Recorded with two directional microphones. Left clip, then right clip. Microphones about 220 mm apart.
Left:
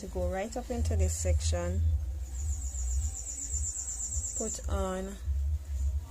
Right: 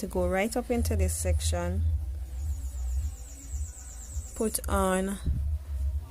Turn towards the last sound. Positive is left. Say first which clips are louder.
# right 8 dB
turn(degrees=-35)  # may be behind; listen again after turning